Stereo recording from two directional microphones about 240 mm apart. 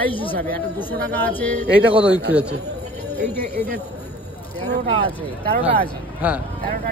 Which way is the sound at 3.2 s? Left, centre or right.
Centre.